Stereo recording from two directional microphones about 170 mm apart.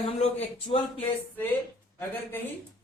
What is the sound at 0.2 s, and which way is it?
Speech, 35° left (ahead or behind).